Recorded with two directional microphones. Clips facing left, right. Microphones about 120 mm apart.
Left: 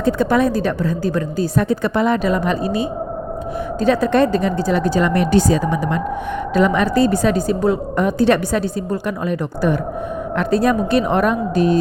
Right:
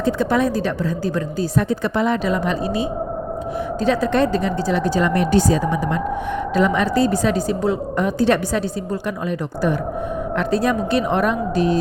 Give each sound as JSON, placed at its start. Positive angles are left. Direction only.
{"t": 0.0, "sound": "speech", "side_deg": 55}
{"t": 3.8, "sound": "a woman's voice", "side_deg": 55}
{"t": 6.6, "sound": "a woman's voice", "side_deg": 55}
{"t": 10.3, "sound": "speech", "side_deg": 50}